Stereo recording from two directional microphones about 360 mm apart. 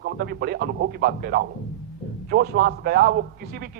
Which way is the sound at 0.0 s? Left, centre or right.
Right.